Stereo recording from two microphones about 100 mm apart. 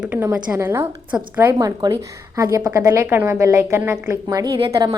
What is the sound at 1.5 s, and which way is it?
A woman's voice, 35° right (ahead or behind).